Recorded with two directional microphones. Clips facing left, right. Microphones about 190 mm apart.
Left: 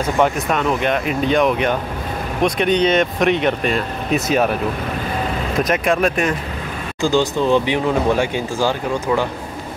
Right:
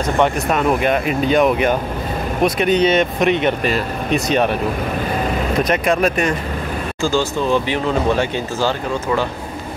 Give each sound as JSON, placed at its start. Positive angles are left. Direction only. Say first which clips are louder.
{"t": 0.5, "sound": "speech", "louder": "right 2 dB", "side_deg": -5}
{"t": 5.6, "sound": "speech", "louder": "even", "side_deg": 0}
{"t": 7.0, "sound": "speech", "louder": "left 2 dB", "side_deg": 15}